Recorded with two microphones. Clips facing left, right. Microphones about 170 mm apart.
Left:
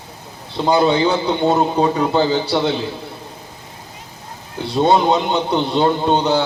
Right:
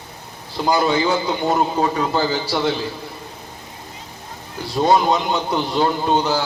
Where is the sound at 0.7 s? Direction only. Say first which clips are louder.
Left 3 dB; 25° left (ahead or behind).